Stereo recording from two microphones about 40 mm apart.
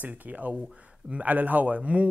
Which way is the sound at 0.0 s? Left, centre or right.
Right.